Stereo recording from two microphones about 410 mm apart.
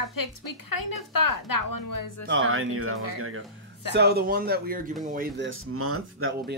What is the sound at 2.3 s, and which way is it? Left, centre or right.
Speech, right.